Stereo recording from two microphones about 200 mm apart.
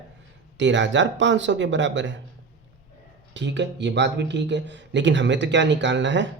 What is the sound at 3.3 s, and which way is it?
Speech, 65° right (ahead or behind).